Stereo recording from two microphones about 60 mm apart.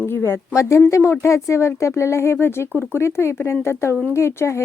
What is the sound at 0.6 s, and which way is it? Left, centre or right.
Speech, left.